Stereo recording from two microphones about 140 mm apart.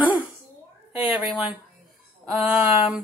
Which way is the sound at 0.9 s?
5° right (ahead or behind).